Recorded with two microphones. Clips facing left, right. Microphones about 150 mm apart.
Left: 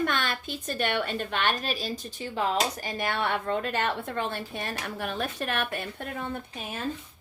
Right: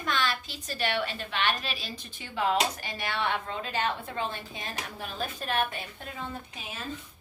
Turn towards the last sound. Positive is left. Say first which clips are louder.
# left 5 dB
turn(degrees=55)  # may be behind; listen again after turning